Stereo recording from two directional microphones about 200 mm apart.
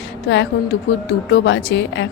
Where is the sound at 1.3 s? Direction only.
60° left (ahead or behind).